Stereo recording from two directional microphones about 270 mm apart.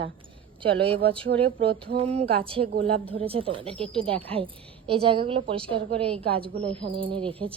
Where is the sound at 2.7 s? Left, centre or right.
Right.